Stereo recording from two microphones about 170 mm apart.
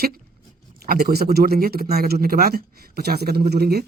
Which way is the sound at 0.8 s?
60° right (ahead or behind).